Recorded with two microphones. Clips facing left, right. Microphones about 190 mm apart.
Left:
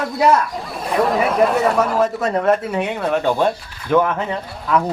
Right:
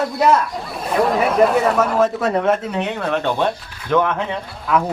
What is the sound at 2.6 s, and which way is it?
Speech, 10° left (ahead or behind).